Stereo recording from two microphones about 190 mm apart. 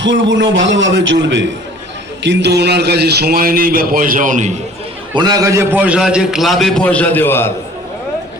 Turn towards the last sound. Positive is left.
turn(degrees=10)  # may be behind; listen again after turning